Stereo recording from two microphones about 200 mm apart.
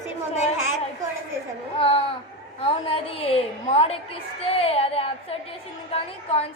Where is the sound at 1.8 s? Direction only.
25° left (ahead or behind).